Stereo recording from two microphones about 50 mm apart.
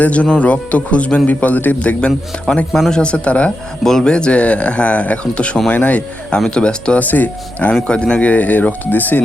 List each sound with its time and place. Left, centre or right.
0.0 s speech: left
3.0 s speech: left
3.8 s speech: centre; by 6.4 s left
6.4 s speech: centre
7.0 s speech: left
7.9 s speech: centre; by 9.2 s left